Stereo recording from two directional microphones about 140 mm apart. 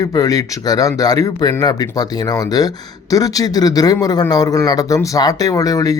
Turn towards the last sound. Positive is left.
turn(degrees=25)  # may be behind; listen again after turning